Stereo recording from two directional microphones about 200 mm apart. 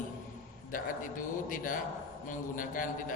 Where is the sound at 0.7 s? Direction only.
40° left (ahead or behind).